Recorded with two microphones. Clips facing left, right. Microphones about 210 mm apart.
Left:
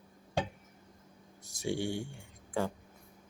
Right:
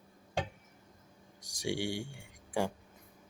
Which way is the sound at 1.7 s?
90° right.